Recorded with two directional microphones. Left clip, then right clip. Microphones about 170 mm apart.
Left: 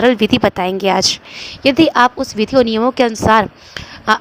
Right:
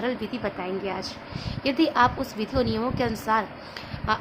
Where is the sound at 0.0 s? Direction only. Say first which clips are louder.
Left 17 dB; 55° left (ahead or behind).